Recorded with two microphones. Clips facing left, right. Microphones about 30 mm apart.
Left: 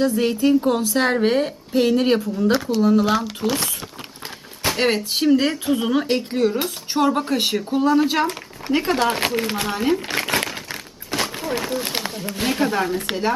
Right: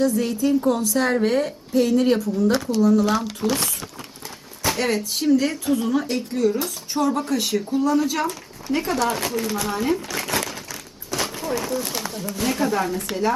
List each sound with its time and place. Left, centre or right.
0.0 s speech: left
3.4 s speech: centre
4.6 s a sound: left
5.3 s speech: left
10.1 s a sound: left
11.2 s speech: left